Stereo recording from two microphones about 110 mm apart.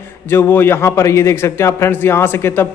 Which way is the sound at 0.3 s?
20° left (ahead or behind).